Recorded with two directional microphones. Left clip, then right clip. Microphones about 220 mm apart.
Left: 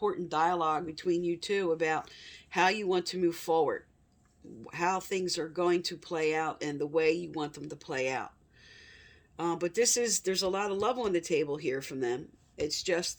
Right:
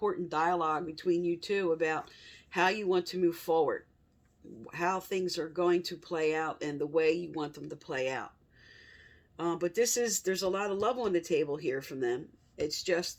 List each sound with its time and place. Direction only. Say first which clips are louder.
0.0 s speech: left 1 dB; 40° left (ahead or behind)
9.4 s speech: left 1 dB; 40° left (ahead or behind)